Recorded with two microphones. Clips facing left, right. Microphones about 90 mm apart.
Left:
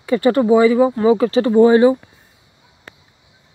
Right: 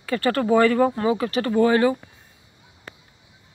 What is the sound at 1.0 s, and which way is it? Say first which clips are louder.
Speech: left 8 dB; 30° left (ahead or behind).